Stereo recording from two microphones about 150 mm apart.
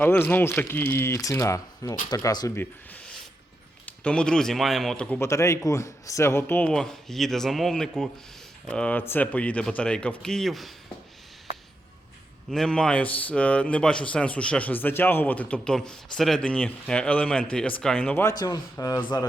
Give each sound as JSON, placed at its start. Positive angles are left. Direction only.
{"t": 0.0, "sound": "a man's voice", "side_deg": 15}
{"t": 2.6, "sound": "a man's voice", "side_deg": 10}
{"t": 5.2, "sound": "a man's voice", "side_deg": 20}
{"t": 12.5, "sound": "a man's voice", "side_deg": 5}
{"t": 18.3, "sound": "a man's voice", "side_deg": 25}